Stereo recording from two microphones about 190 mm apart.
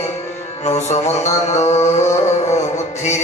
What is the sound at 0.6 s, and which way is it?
Music, 35° left (ahead or behind).